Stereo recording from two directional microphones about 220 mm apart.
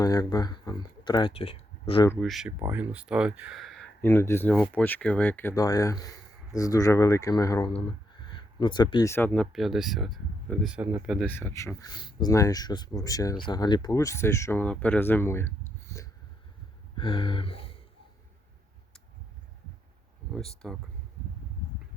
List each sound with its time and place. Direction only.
0.0 s speech: 15° left (ahead or behind)
2.0 s speech: centre (ahead or behind)
16.9 s a sound: 20° left (ahead or behind)
20.3 s speech: centre (ahead or behind)